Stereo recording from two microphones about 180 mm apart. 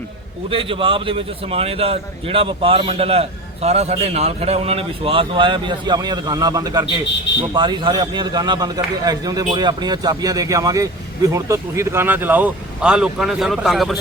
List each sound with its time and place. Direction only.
0.5 s a man's voice: 30° right (ahead or behind); by 14.0 s centre (ahead or behind)